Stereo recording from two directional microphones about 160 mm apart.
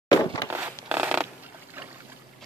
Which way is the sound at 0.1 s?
25° left (ahead or behind).